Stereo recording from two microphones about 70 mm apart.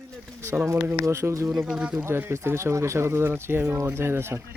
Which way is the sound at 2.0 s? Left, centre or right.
Right.